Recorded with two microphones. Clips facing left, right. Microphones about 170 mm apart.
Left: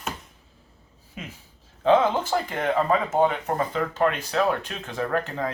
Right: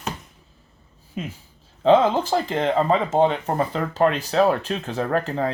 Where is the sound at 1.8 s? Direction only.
30° right (ahead or behind).